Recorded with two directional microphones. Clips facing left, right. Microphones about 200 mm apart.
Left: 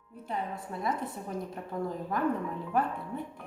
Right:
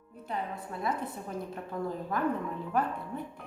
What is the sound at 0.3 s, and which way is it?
A woman's voice, 10° left (ahead or behind).